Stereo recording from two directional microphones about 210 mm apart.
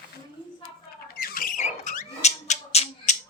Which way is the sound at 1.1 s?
45° left (ahead or behind).